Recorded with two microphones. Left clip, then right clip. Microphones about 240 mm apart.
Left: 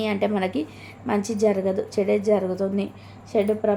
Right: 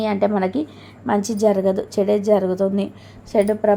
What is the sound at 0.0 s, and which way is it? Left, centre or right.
A woman's voice, right.